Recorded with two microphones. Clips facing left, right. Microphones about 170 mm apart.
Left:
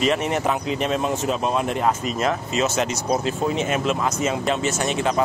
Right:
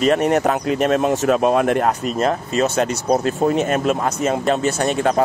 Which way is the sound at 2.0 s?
40° right (ahead or behind).